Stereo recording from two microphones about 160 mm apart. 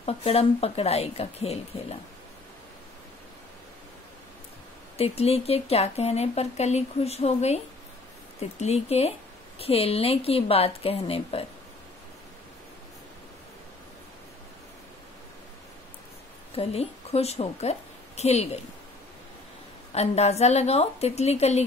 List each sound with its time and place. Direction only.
0.0 s speech: 40° left (ahead or behind)
4.9 s speech: 40° left (ahead or behind)
16.5 s a woman's voice: 40° left (ahead or behind)
19.9 s speech: 40° left (ahead or behind)